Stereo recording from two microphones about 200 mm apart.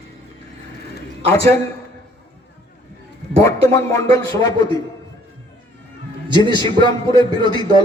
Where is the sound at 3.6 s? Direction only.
15° left (ahead or behind).